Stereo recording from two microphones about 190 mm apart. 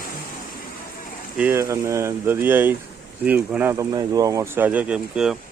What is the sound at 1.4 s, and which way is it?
Speech, 10° right (ahead or behind).